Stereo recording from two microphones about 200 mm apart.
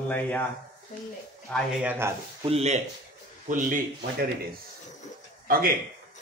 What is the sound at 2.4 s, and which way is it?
Speech, 30° right (ahead or behind).